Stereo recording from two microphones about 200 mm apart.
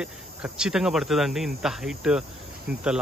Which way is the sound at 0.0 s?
5° right (ahead or behind).